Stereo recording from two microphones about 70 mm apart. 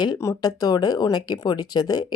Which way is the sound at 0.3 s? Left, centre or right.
Left.